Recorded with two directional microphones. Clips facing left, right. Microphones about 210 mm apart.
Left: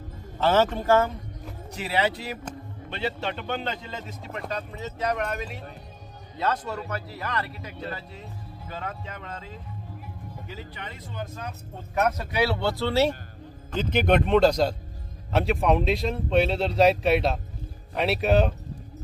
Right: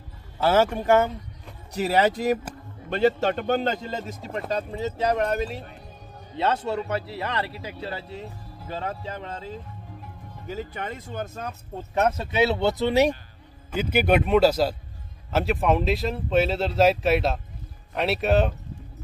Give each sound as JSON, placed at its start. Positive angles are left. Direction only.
{"t": 0.4, "sound": "speech", "side_deg": -10}
{"t": 1.7, "sound": "a man's voice", "side_deg": -40}
{"t": 10.4, "sound": "speech", "side_deg": -45}
{"t": 11.9, "sound": "speech", "side_deg": -25}